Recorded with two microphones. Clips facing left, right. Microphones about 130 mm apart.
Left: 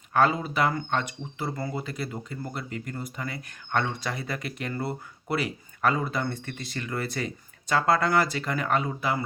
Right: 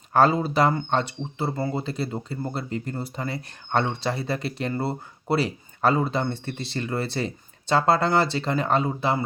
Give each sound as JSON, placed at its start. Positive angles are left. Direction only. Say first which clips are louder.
{"t": 0.1, "sound": "speech", "louder": "right 4 dB", "side_deg": -35}